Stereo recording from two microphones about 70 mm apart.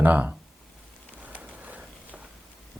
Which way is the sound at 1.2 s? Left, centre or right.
Right.